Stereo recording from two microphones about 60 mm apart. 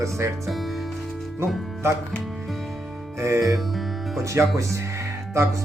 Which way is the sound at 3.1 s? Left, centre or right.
Right.